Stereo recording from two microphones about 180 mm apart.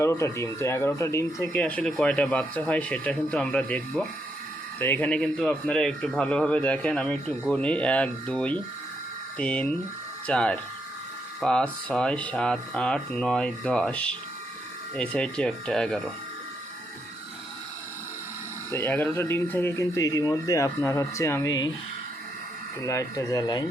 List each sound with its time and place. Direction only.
0.0 s speech: 15° left (ahead or behind)
18.7 s speech: 15° left (ahead or behind)
22.8 s speech: 15° left (ahead or behind)